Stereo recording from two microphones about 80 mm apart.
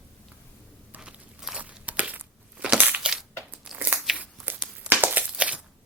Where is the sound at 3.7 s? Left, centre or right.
Right.